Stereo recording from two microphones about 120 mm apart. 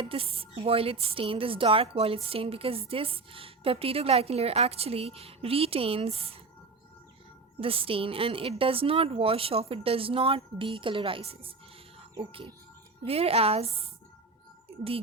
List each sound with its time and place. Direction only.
0.0 s a woman's voice: 50° right (ahead or behind)
7.6 s a woman's voice: 50° right (ahead or behind)
13.1 s a woman's voice: 55° right (ahead or behind)